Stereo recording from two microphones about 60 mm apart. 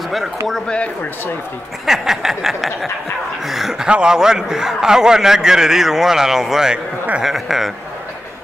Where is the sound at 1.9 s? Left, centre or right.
Centre.